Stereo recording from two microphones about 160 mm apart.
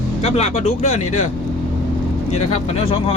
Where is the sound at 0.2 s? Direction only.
45° left (ahead or behind).